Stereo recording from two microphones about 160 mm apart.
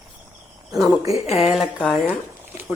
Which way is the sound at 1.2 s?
40° left (ahead or behind).